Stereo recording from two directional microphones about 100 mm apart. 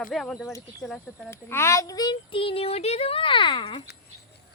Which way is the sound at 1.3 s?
25° left (ahead or behind).